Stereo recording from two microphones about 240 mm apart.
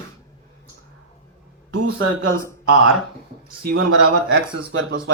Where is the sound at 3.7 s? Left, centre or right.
Right.